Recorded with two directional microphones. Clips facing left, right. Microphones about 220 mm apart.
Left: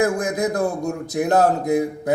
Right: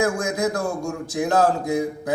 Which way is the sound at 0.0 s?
20° left (ahead or behind).